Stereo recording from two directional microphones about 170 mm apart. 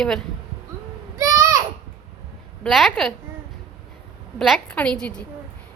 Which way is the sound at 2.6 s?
Centre (ahead or behind).